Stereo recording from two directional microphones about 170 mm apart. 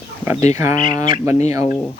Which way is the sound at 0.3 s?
40° left (ahead or behind).